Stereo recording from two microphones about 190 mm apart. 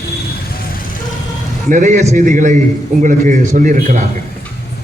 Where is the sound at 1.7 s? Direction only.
40° right (ahead or behind).